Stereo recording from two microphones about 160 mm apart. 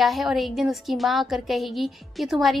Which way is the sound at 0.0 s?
Centre (ahead or behind).